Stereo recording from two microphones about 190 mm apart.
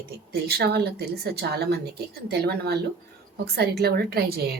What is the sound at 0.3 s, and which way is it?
Speech, 55° right (ahead or behind).